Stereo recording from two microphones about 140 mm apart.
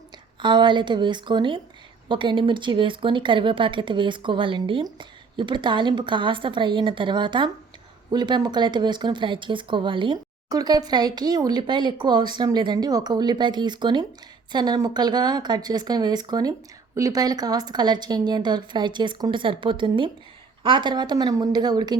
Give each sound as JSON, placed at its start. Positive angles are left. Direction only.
{"t": 0.4, "sound": "speech", "side_deg": -35}